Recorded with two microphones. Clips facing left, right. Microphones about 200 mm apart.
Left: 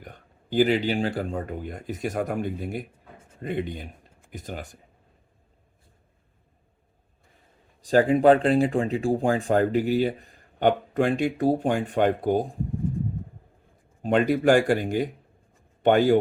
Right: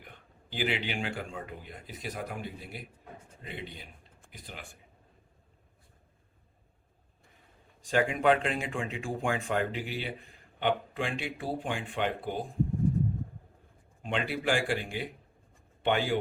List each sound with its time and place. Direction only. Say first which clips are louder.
0.0 s speech: left 7 dB; 40° left (ahead or behind)
7.8 s speech: left 9 dB; 35° left (ahead or behind)
14.0 s speech: left 11 dB; 45° left (ahead or behind)